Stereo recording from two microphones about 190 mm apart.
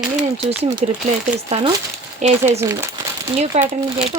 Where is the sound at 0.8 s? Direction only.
40° right (ahead or behind).